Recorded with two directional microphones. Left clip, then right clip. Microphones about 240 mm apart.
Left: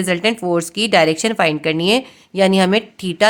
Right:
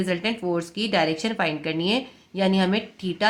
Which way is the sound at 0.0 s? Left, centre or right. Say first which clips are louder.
Left 8 dB; left.